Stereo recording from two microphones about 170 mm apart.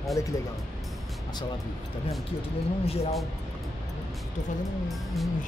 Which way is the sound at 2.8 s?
35° left (ahead or behind).